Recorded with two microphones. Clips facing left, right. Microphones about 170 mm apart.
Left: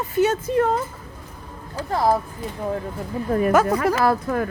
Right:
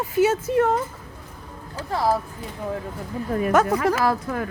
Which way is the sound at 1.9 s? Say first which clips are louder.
Left 2 dB; 50° left (ahead or behind).